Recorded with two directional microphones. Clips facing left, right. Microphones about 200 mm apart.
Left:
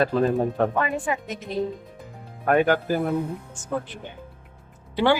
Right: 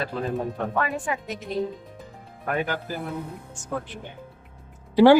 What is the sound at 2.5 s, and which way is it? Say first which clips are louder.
Speech: left 8 dB; 60° left (ahead or behind).